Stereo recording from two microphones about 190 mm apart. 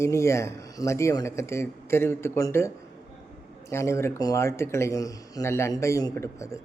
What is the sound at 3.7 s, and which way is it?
Speech, 15° left (ahead or behind).